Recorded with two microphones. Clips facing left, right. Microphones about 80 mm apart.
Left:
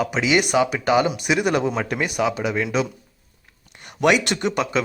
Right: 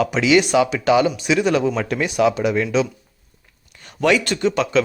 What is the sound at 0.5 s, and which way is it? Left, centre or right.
Speech, left.